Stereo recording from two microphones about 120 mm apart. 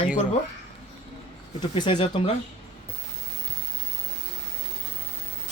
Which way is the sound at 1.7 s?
50° left (ahead or behind).